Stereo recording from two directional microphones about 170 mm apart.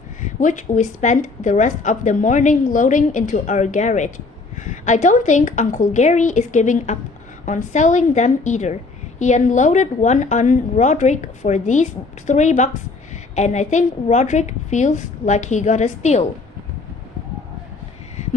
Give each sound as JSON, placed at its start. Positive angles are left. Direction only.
{"t": 0.2, "sound": "a woman's voice", "side_deg": 45}